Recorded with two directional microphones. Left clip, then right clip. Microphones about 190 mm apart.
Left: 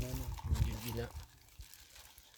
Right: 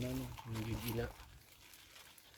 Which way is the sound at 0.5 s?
50° left (ahead or behind).